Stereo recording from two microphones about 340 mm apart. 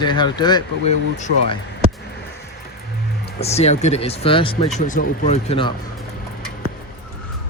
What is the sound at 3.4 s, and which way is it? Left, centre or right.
Speech, centre.